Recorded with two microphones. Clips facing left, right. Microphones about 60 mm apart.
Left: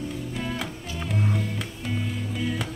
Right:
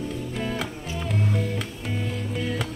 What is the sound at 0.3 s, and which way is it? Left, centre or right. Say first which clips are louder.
Music: right 2 dB; centre.